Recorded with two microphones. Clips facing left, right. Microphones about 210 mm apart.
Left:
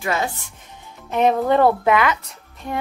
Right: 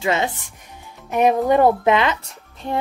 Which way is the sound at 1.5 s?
20° right (ahead or behind).